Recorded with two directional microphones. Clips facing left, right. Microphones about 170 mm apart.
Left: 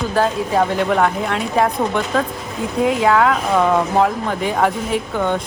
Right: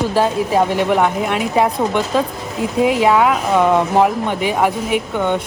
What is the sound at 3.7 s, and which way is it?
Speech, 20° right (ahead or behind).